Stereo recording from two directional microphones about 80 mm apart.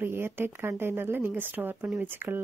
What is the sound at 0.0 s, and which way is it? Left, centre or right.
Speech, right.